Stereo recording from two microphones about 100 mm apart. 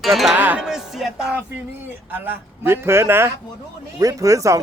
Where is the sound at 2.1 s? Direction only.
20° right (ahead or behind).